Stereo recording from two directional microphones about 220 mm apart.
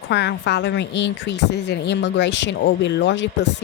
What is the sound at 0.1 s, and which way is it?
Speech, 50° left (ahead or behind).